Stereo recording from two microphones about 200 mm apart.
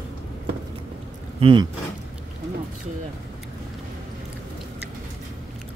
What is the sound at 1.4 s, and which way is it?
Speech, 25° right (ahead or behind).